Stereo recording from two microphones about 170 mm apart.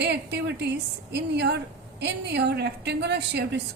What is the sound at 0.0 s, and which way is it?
A woman's voice, 80° right.